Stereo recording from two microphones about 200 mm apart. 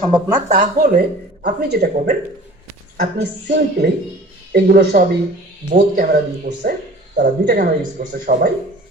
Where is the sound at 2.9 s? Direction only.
55° right (ahead or behind).